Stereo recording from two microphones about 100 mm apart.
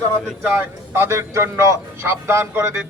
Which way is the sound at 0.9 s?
25° right (ahead or behind).